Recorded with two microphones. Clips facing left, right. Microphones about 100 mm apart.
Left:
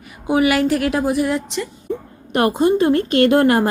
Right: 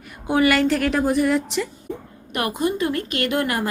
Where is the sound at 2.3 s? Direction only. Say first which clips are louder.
Left 8 dB; 30° left (ahead or behind).